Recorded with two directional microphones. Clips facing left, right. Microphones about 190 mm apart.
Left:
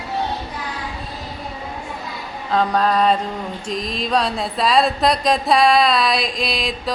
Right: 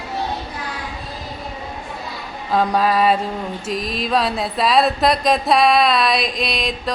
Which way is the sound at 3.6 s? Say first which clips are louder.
Even; 5° right (ahead or behind).